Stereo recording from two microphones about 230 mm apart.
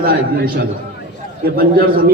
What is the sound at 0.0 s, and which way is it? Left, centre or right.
A man's voice, right.